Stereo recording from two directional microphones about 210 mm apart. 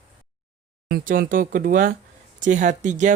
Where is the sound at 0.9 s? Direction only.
45° right (ahead or behind).